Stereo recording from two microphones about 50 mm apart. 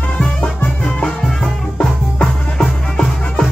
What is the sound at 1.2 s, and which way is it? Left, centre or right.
Music, centre.